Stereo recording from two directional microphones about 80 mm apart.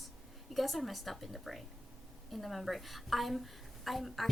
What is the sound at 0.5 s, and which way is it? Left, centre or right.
Speech, centre.